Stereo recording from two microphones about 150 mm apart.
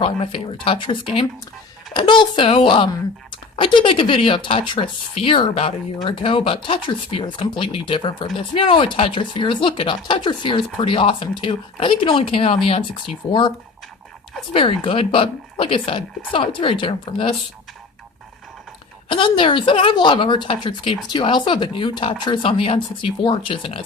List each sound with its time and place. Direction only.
0.0 s speech: 35° left (ahead or behind)
14.5 s speech: 35° left (ahead or behind)
19.0 s speech: 35° left (ahead or behind)